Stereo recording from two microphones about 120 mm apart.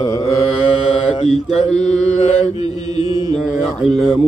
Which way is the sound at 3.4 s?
Centre (ahead or behind).